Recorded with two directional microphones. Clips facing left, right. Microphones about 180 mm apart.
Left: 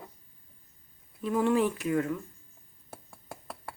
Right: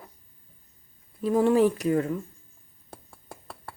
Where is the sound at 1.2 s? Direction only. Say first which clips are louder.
Right 5 dB; 35° right (ahead or behind).